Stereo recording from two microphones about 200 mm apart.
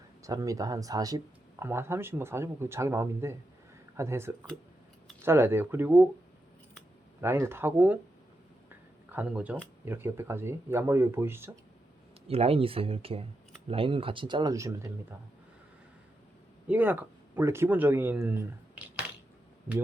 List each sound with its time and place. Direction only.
0.2 s speech: 15° right (ahead or behind)
7.2 s speech: 10° right (ahead or behind)
9.1 s speech: 5° right (ahead or behind)
12.3 s speech: 30° right (ahead or behind)
16.6 s speech: 10° right (ahead or behind)